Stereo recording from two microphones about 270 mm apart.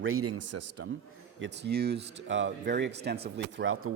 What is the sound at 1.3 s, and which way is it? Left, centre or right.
Speech, right.